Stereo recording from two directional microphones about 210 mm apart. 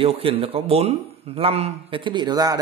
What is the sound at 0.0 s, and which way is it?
Speech, 25° right (ahead or behind).